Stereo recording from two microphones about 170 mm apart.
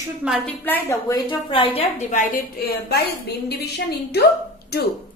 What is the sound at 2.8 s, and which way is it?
Speech, 75° left (ahead or behind).